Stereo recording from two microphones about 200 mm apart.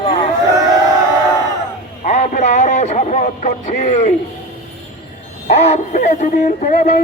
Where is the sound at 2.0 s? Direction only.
35° left (ahead or behind).